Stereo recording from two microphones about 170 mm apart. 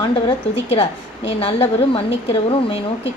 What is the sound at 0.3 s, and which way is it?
A woman's voice, 35° left (ahead or behind).